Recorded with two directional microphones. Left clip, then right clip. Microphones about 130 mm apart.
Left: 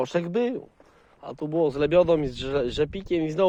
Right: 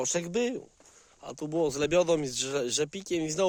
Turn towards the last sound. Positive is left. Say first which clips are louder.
# left 5 dB
turn(degrees=-25)  # may be behind; listen again after turning